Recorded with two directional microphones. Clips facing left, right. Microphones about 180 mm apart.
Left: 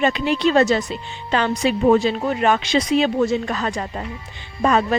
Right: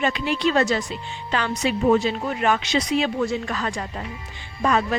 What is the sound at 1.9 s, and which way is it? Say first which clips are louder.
Speech: left 4 dB; 30° left (ahead or behind).